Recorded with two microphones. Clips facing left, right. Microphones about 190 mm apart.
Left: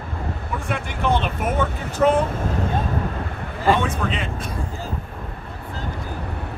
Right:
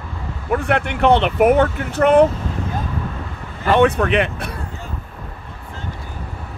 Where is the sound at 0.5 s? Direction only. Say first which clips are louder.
Right 11 dB; 65° right (ahead or behind).